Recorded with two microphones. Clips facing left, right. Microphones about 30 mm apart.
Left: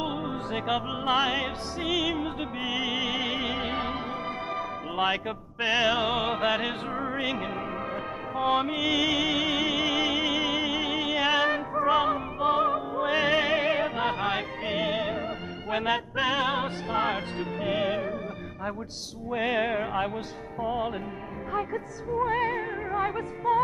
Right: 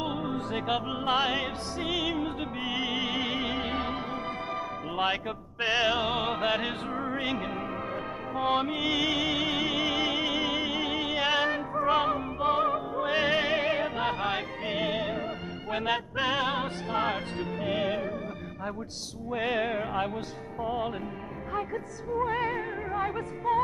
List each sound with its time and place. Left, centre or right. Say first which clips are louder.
0.0 s music: even; centre
0.7 s music: left 2 dB; centre
5.1 s music: left 2 dB; centre
8.7 s music: left 2 dB; centre
9.0 s music: left 2 dB; centre
13.1 s music: left 2 dB; centre
19.3 s music: left 2 dB; centre